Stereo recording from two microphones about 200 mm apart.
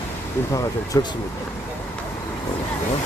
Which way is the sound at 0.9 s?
20° left (ahead or behind).